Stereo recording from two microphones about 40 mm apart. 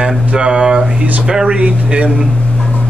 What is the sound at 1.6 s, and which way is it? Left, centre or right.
Speech, right.